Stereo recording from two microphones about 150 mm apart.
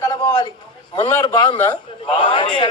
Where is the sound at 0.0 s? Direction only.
25° left (ahead or behind).